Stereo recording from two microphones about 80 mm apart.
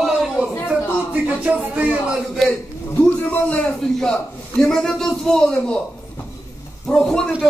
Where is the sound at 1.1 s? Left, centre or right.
Centre.